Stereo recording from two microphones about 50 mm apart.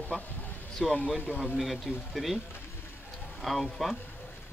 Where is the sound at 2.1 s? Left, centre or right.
Centre.